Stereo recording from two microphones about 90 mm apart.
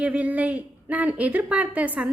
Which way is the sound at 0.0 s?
15° right (ahead or behind).